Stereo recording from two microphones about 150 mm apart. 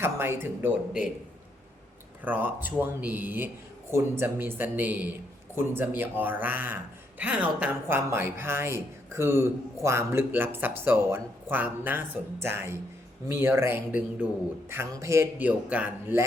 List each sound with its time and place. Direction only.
0.0 s speech: 15° right (ahead or behind)
2.2 s speech: 10° right (ahead or behind)